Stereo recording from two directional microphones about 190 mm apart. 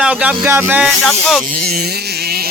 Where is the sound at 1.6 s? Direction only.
55° right (ahead or behind).